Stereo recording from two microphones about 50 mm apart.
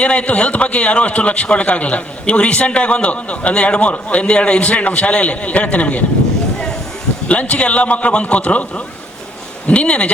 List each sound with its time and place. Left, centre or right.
0.0 s a man's voice: left
7.3 s a man's voice: left